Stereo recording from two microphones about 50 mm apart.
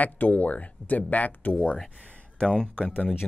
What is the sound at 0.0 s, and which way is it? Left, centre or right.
Music, left.